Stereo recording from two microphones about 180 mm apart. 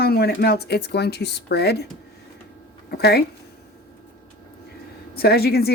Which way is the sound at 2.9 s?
65° left (ahead or behind).